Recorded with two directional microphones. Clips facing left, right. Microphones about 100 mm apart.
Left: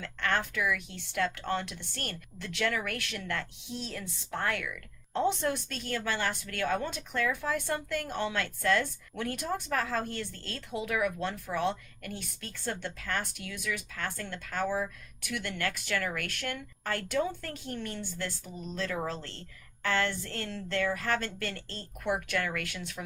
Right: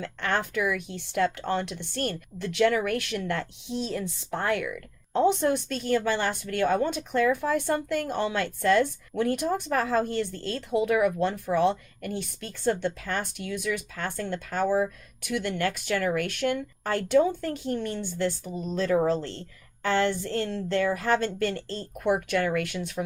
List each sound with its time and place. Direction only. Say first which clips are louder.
0.0 s speech: right 3 dB; 20° right (ahead or behind)